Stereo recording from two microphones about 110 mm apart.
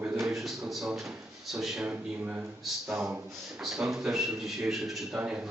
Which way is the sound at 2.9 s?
20° right (ahead or behind).